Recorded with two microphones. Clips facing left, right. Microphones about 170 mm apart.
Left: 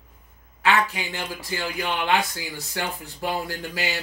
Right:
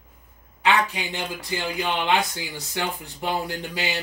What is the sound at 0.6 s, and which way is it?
A man's voice, 20° right (ahead or behind).